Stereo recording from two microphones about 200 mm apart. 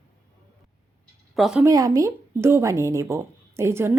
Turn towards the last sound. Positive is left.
turn(degrees=-10)  # may be behind; listen again after turning